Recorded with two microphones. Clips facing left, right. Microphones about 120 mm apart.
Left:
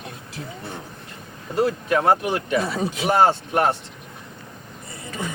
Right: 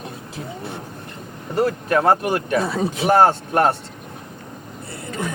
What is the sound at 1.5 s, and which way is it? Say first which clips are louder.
Speech: right 2 dB; 50° right (ahead or behind).